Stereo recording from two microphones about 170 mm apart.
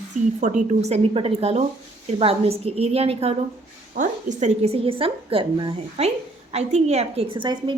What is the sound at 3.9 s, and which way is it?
A woman's voice, 50° right (ahead or behind).